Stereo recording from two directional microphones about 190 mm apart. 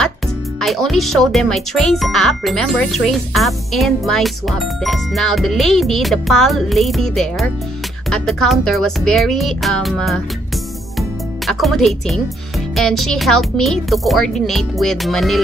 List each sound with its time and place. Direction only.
0.6 s speech: centre (ahead or behind)